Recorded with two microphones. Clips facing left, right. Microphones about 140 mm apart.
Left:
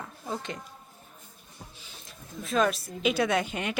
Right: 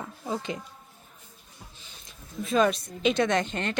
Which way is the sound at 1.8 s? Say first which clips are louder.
Left 2 dB; centre (ahead or behind).